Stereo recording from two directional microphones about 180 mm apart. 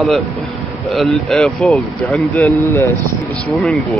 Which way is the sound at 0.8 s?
Centre (ahead or behind).